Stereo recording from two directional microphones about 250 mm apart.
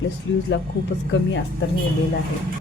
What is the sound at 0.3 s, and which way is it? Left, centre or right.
Speech, left.